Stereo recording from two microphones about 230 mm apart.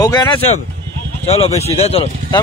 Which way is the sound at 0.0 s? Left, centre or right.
Centre.